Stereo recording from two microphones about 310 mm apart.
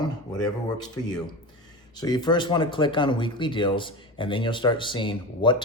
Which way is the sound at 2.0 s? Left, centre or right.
Centre.